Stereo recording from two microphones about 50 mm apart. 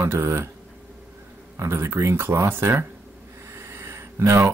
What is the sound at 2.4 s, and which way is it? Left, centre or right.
Speech, right.